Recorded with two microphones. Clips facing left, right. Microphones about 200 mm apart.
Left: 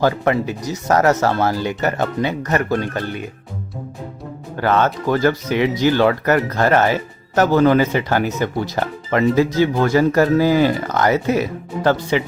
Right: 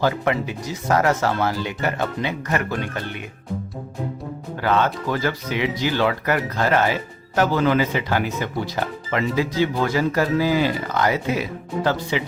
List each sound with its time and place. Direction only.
0.0 s speech: 40° left (ahead or behind)
4.6 s speech: 50° left (ahead or behind)